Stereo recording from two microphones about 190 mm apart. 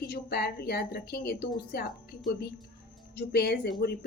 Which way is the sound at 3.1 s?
55° left (ahead or behind).